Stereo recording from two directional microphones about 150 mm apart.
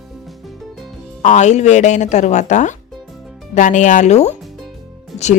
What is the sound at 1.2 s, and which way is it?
Speech, 50° left (ahead or behind).